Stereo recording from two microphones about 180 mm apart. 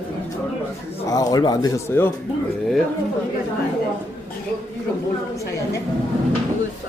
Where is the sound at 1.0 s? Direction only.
20° left (ahead or behind).